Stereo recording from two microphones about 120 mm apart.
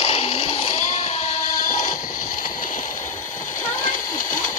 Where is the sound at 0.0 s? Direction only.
60° left (ahead or behind).